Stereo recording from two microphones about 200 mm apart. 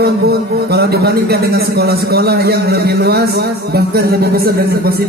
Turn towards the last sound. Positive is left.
turn(degrees=-50)  # may be behind; listen again after turning